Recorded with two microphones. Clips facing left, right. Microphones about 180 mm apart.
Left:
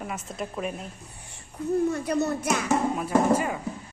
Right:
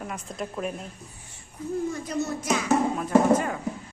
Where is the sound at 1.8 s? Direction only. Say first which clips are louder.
Left 4 dB; 65° left (ahead or behind).